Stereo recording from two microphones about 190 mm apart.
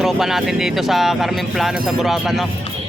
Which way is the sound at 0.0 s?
Centre (ahead or behind).